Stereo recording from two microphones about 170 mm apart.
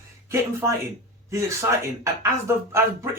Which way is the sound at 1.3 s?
15° right (ahead or behind).